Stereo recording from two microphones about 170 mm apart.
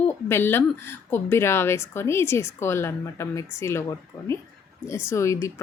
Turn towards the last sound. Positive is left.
turn(degrees=15)  # may be behind; listen again after turning